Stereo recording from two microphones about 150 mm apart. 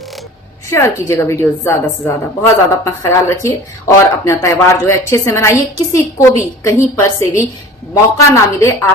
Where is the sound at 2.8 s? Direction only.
20° left (ahead or behind).